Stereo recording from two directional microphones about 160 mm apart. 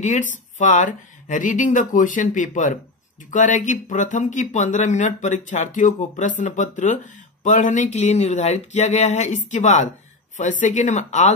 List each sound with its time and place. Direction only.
0.0 s speech: 50° left (ahead or behind)